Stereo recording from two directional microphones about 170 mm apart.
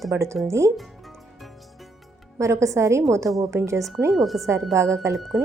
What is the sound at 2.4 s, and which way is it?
A woman's voice, 15° right (ahead or behind).